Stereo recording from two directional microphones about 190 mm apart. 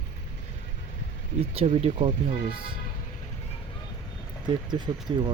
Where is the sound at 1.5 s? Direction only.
30° right (ahead or behind).